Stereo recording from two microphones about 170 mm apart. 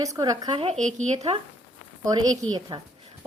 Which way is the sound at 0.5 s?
40° right (ahead or behind).